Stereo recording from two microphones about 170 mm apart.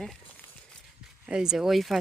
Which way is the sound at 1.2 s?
5° right (ahead or behind).